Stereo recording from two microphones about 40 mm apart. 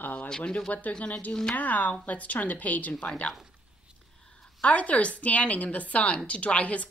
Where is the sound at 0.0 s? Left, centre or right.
Left.